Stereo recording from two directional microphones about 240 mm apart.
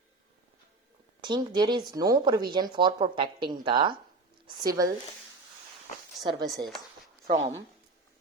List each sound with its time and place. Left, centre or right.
1.2 s speech: centre
6.2 s speech: centre